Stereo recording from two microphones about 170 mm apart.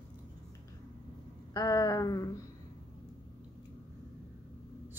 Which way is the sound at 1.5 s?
20° left (ahead or behind).